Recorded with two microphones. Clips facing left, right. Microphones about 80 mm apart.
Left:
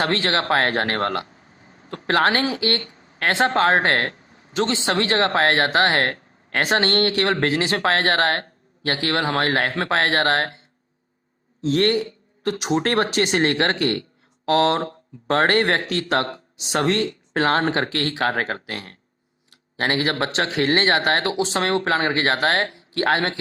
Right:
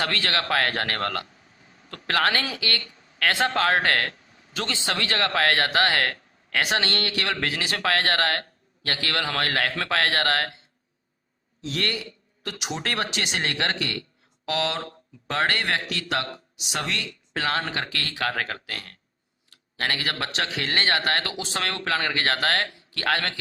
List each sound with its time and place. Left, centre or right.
0.0 s speech: left
11.6 s speech: left